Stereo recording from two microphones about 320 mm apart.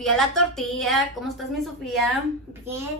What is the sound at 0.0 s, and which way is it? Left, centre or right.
A woman's voice, centre.